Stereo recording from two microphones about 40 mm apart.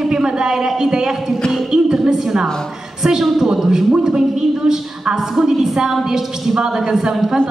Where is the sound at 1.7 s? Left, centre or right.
Centre.